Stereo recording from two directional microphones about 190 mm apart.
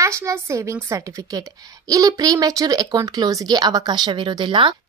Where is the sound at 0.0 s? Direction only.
15° right (ahead or behind).